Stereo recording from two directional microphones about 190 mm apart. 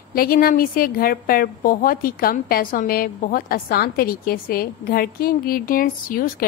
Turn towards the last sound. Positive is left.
turn(degrees=50)  # may be behind; listen again after turning